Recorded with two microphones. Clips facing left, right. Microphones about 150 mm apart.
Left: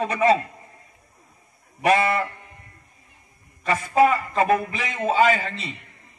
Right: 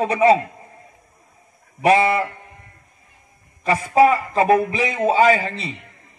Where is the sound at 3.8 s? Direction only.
35° right (ahead or behind).